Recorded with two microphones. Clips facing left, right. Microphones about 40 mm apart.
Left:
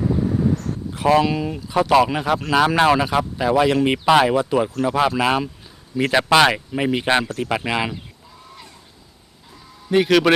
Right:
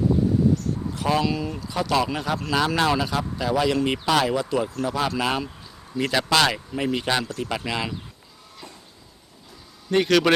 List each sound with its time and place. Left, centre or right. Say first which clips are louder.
0.9 s speech: left 7 dB; left
9.9 s a man's voice: left 3 dB; centre